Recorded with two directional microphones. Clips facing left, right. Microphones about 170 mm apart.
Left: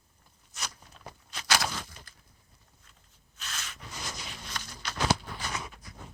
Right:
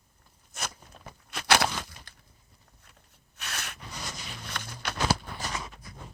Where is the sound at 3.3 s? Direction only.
65° right (ahead or behind).